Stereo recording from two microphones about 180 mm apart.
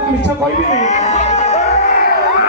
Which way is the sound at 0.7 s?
40° left (ahead or behind).